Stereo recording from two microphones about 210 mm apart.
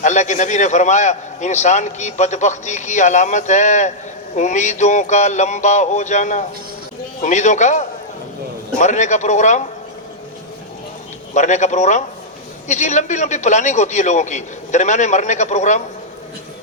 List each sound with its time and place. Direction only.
0.0 s a man's voice: 35° left (ahead or behind)
11.3 s a man's voice: 35° left (ahead or behind)